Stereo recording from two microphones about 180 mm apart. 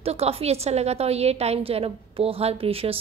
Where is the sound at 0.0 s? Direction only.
35° right (ahead or behind).